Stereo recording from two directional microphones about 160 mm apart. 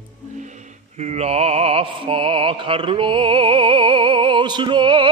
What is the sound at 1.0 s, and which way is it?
Music, 45° right (ahead or behind).